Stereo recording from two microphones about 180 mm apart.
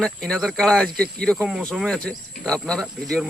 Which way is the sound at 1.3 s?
10° right (ahead or behind).